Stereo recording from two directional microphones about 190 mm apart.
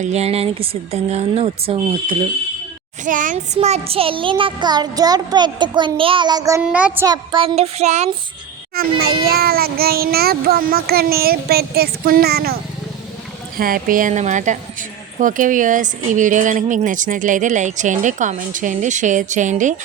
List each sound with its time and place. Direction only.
0.0 s a woman's voice: 35° right (ahead or behind)
3.0 s child singing: 45° right (ahead or behind); by 6.6 s 20° right (ahead or behind)
6.6 s child singing: 5° right (ahead or behind); by 8.1 s 35° right (ahead or behind)
8.7 s child singing: 50° right (ahead or behind)
13.6 s a woman's voice: 50° right (ahead or behind)